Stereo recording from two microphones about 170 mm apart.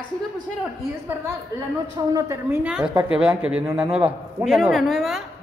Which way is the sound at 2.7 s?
5° right (ahead or behind).